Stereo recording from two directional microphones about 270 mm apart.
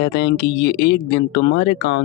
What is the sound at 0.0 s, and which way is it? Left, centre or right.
Speech, left.